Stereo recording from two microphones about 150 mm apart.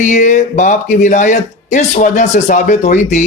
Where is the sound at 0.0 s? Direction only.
50° left (ahead or behind).